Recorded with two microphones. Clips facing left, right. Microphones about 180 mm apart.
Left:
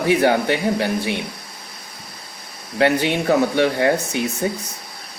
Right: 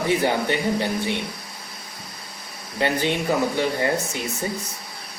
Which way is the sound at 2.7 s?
75° left (ahead or behind).